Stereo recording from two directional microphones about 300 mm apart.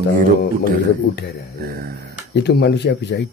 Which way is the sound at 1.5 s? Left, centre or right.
Right.